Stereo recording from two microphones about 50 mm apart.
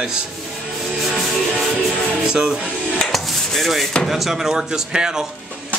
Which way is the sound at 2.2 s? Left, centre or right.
Centre.